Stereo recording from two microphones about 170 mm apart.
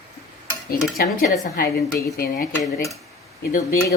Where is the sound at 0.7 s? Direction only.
60° left (ahead or behind).